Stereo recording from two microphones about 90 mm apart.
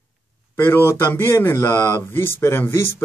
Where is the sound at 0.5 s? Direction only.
25° left (ahead or behind).